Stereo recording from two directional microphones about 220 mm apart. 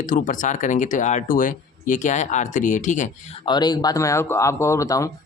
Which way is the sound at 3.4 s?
20° left (ahead or behind).